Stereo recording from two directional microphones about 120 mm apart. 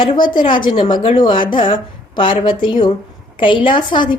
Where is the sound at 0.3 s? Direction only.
40° left (ahead or behind).